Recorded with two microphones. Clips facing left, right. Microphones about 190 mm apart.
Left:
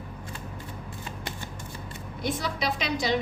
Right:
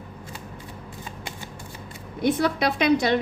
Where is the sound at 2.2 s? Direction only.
60° right (ahead or behind).